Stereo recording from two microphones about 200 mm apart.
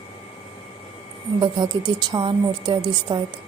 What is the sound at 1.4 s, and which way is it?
A woman's voice, 20° right (ahead or behind).